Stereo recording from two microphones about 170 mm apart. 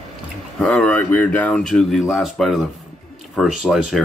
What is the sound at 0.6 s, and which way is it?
Speech, 5° left (ahead or behind).